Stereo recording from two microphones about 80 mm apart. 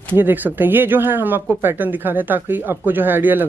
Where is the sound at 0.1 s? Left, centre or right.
Right.